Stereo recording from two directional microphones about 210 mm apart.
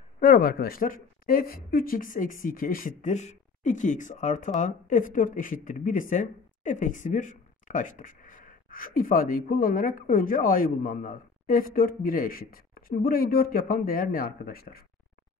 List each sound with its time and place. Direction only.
0.2 s speech: 45° left (ahead or behind)